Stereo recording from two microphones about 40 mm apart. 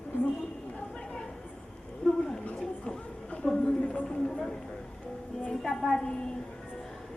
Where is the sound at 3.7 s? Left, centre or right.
Left.